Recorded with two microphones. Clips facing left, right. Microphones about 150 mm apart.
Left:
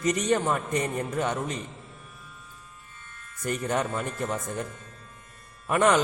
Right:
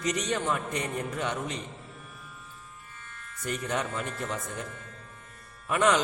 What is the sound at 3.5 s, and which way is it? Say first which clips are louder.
Speech: left 4 dB; 45° left (ahead or behind).